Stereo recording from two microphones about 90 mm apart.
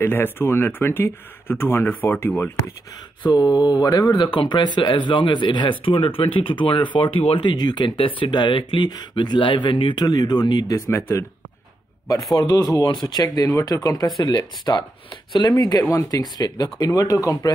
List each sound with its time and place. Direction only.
0.0 s speech: 25° left (ahead or behind)
3.3 s speech: 50° left (ahead or behind); by 7.5 s 90° left
7.5 s speech: 55° left (ahead or behind); by 8.8 s 70° left (ahead or behind)
8.8 s speech: 55° left (ahead or behind)
10.0 s speech: 50° left (ahead or behind)
10.9 s speech: 30° left (ahead or behind)
12.4 s speech: 45° left (ahead or behind)
14.2 s speech: 55° left (ahead or behind)
15.9 s speech: 40° left (ahead or behind)